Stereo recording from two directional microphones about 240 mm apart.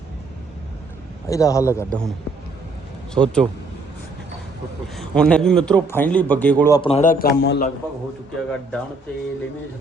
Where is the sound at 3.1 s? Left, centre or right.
Centre.